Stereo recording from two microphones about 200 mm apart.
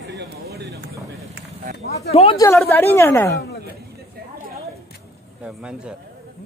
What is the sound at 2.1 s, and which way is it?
Speech, 30° left (ahead or behind).